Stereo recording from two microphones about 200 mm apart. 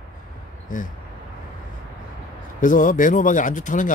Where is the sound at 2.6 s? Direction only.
40° left (ahead or behind).